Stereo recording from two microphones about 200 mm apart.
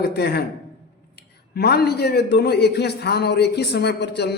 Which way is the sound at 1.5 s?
55° left (ahead or behind).